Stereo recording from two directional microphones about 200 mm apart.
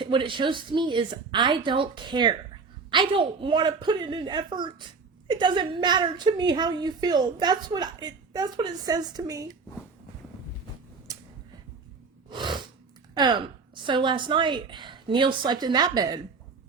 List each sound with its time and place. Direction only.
0.0 s a woman's voice: 25° right (ahead or behind)
11.1 s a sound: 15° right (ahead or behind)
12.3 s sneeze: 25° right (ahead or behind)
13.1 s a woman's voice: 20° right (ahead or behind)